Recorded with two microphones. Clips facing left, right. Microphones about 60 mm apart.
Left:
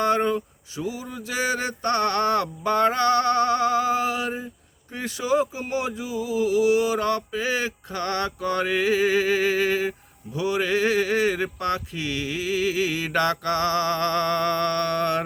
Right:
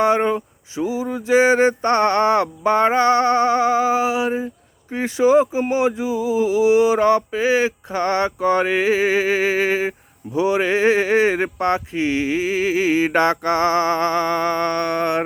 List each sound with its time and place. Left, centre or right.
0.0 s speech: centre